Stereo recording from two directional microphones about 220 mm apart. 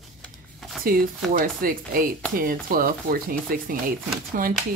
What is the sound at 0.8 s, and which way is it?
Speech, 40° right (ahead or behind).